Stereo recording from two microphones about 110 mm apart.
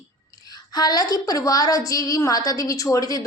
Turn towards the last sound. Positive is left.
turn(degrees=35)  # may be behind; listen again after turning